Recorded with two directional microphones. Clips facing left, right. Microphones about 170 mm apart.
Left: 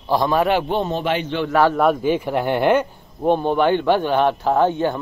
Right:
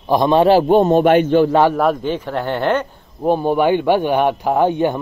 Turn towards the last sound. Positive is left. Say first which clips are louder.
# right 2 dB
turn(degrees=-15)  # may be behind; listen again after turning